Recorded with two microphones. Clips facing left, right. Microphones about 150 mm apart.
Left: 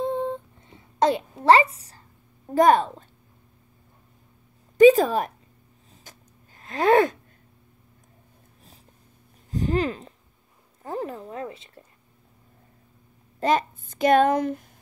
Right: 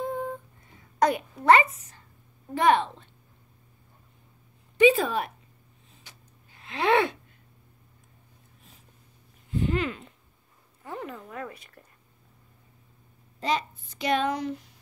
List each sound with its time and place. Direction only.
0.0 s a sound: 25° left (ahead or behind)
0.9 s a child's voice: 25° left (ahead or behind); by 3.1 s 40° left (ahead or behind)
4.7 s speech: 40° left (ahead or behind)
6.0 s a sound: 45° left (ahead or behind)
9.5 s speech: 40° left (ahead or behind)
13.4 s a child's voice: 50° left (ahead or behind)